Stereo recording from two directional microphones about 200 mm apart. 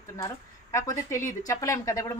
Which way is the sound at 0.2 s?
15° left (ahead or behind).